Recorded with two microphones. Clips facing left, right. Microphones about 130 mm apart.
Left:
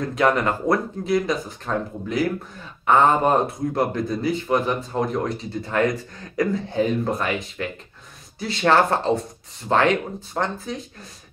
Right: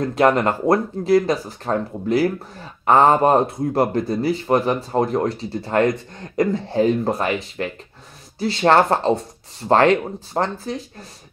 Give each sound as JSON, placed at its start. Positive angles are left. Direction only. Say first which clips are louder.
{"t": 0.1, "sound": "speech", "louder": "right 3 dB", "side_deg": -30}